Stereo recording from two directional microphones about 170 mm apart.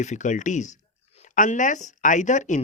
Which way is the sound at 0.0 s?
45° left (ahead or behind).